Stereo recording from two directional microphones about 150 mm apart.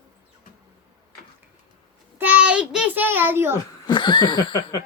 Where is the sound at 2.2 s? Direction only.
10° right (ahead or behind).